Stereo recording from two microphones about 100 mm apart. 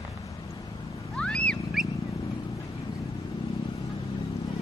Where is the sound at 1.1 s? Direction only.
10° left (ahead or behind).